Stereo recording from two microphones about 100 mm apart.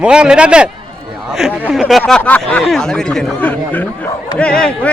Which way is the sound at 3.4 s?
15° left (ahead or behind).